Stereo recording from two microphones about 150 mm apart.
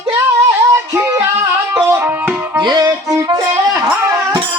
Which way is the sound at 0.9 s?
20° right (ahead or behind).